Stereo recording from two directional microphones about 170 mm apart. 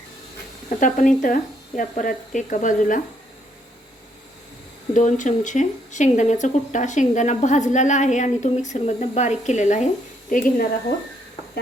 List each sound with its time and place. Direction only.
0.8 s speech: 50° left (ahead or behind)
4.9 s speech: 50° left (ahead or behind)